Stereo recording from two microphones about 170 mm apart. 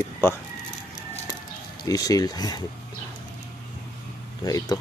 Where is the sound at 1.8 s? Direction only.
20° left (ahead or behind).